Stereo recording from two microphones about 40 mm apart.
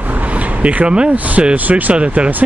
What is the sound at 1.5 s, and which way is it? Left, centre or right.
Speech, right.